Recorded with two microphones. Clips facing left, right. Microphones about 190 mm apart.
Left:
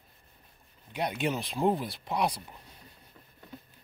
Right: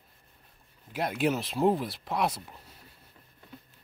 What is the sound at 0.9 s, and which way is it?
Speech, centre (ahead or behind).